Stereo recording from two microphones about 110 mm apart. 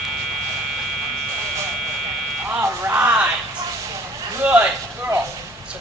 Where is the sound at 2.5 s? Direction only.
20° right (ahead or behind).